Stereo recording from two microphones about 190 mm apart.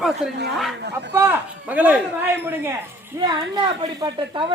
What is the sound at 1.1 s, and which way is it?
Speech, 10° right (ahead or behind).